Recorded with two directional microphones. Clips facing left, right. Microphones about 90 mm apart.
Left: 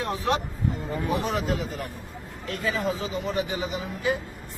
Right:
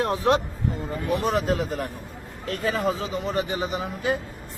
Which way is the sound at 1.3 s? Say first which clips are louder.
Right 4 dB; 50° right (ahead or behind).